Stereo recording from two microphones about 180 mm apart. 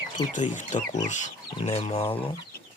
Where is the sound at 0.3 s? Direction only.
45° left (ahead or behind).